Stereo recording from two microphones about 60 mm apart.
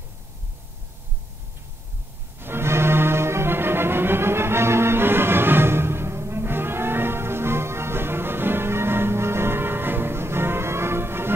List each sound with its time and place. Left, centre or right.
2.4 s music: right